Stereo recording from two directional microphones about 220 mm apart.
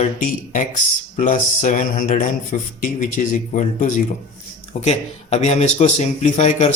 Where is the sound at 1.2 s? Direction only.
35° left (ahead or behind).